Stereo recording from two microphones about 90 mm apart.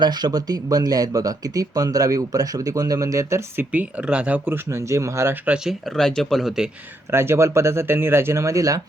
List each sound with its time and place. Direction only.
0.0 s speech: 50° right (ahead or behind); by 3.7 s 30° right (ahead or behind)
3.7 s speech: 15° right (ahead or behind); by 5.3 s 35° right (ahead or behind)
6.0 s speech: 5° left (ahead or behind)
7.1 s speech: 30° right (ahead or behind)